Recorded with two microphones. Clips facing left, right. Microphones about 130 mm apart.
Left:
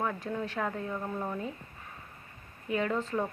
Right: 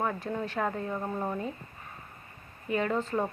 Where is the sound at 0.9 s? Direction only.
20° right (ahead or behind).